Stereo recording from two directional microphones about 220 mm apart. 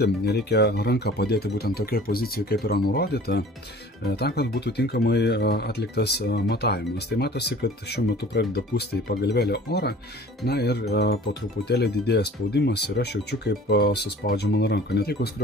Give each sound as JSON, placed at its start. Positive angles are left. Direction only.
{"t": 0.0, "sound": "speech", "side_deg": 45}